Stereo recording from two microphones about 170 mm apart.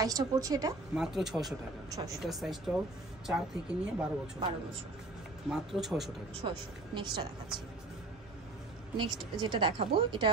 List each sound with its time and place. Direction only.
0.0 s speech: 20° right (ahead or behind)
0.9 s speech: 5° right (ahead or behind)
5.5 s speech: centre (ahead or behind)
6.4 s speech: 30° right (ahead or behind)
8.9 s speech: 25° right (ahead or behind)